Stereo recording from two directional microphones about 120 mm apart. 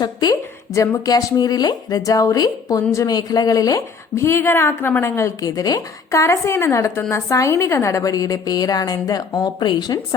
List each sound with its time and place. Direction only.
0.0 s a woman's voice: 35° left (ahead or behind)